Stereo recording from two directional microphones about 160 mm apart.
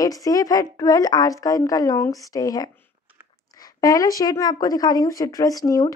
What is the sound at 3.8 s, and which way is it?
Speech, 20° left (ahead or behind).